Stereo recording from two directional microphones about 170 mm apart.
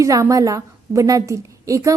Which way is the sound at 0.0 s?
20° right (ahead or behind).